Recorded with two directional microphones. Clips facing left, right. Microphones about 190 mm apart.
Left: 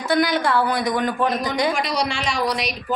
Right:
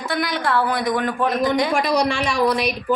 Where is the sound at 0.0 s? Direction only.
Centre (ahead or behind).